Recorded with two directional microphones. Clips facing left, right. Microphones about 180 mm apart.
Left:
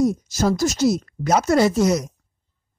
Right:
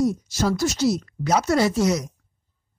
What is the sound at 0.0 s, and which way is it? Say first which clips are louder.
Speech: left 2 dB; 45° left (ahead or behind).